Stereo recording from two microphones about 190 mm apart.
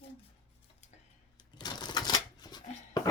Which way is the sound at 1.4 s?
20° left (ahead or behind).